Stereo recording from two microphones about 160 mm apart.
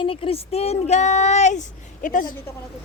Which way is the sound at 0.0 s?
35° left (ahead or behind).